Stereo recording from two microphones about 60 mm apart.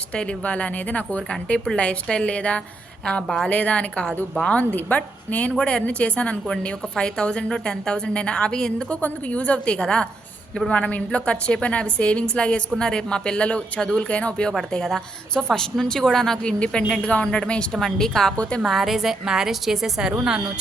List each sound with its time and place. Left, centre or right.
0.1 s a woman's voice: centre
9.0 s a woman's voice: left
14.5 s a woman's voice: centre